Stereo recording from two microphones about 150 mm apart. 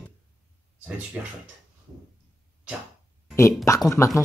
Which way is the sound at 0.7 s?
10° right (ahead or behind).